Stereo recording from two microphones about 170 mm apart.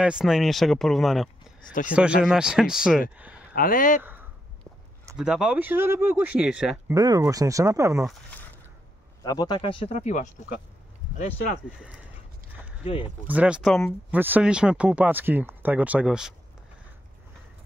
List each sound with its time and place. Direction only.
0.0 s speech: 5° right (ahead or behind)
1.7 s speech: 50° left (ahead or behind)
2.2 s speech: 5° right (ahead or behind)
3.2 s a sound: 10° right (ahead or behind)
3.5 s speech: 55° left (ahead or behind)
4.0 s a sound: 10° right (ahead or behind)
5.1 s speech: 5° right (ahead or behind)
6.9 s speech: 20° right (ahead or behind)
8.1 s speech: 10° left (ahead or behind)
9.2 s speech: 20° left (ahead or behind); by 10.3 s 45° left (ahead or behind)
12.8 s speech: 35° left (ahead or behind)
13.3 s speech: 5° right (ahead or behind)